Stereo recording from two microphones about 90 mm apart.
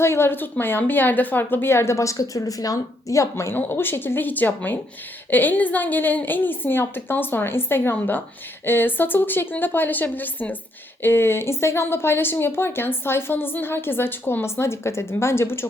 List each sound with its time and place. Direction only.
0.0 s a woman's voice: 30° left (ahead or behind)